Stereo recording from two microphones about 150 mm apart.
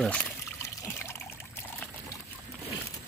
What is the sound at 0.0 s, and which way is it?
Trickle, 10° left (ahead or behind).